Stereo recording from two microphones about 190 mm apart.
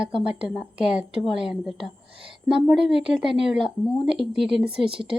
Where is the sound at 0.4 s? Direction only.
5° right (ahead or behind).